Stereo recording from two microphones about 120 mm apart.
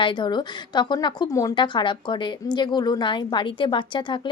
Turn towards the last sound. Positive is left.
turn(degrees=40)  # may be behind; listen again after turning